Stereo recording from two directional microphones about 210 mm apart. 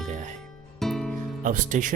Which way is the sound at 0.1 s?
35° right (ahead or behind).